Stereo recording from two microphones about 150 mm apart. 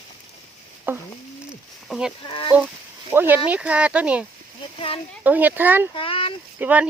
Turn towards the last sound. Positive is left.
turn(degrees=-10)  # may be behind; listen again after turning